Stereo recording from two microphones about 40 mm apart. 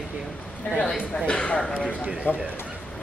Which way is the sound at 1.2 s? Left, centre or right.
Left.